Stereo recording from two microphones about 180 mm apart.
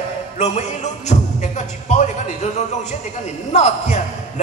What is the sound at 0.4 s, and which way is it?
A man's voice, 40° left (ahead or behind).